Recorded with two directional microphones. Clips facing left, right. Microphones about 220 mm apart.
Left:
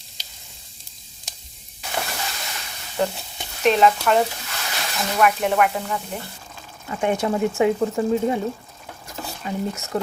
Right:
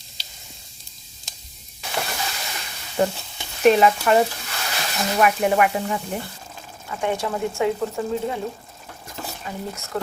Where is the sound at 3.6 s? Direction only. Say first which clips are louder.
Right 2 dB; 5° right (ahead or behind).